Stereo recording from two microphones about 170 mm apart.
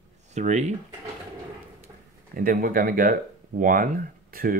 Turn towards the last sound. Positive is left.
turn(degrees=-55)  # may be behind; listen again after turning